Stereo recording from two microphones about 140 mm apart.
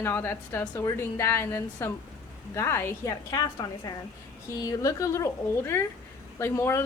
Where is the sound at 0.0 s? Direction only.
15° left (ahead or behind).